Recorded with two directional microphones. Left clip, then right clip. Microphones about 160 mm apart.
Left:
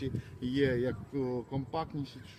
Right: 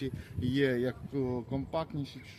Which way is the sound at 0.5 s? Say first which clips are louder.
Even; 50° right (ahead or behind).